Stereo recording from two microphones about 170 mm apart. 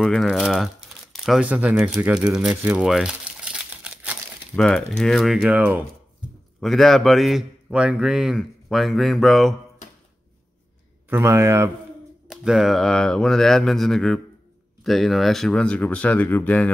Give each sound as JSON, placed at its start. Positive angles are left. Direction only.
{"t": 0.0, "sound": "speech", "side_deg": 0}
{"t": 2.3, "sound": "crumpling", "side_deg": -5}
{"t": 4.6, "sound": "a man's voice", "side_deg": 5}
{"t": 11.1, "sound": "speech", "side_deg": -15}
{"t": 12.3, "sound": "a man's voice", "side_deg": -5}